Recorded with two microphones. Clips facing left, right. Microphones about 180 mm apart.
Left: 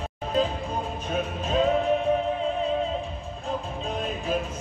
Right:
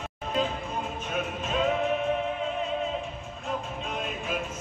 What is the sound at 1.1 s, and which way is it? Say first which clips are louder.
Music: left 4 dB; 35° left (ahead or behind).